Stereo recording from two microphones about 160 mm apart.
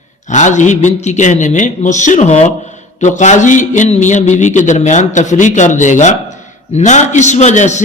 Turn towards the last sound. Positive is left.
turn(degrees=45)  # may be behind; listen again after turning